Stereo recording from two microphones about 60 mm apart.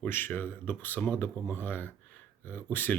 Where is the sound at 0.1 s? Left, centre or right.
Left.